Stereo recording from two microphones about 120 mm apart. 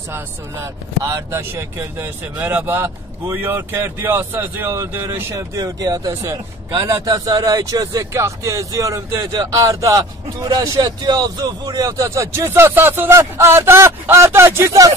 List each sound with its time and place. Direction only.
0.1 s speech: 25° right (ahead or behind)